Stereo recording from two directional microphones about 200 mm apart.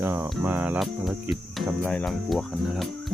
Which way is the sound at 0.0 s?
10° right (ahead or behind).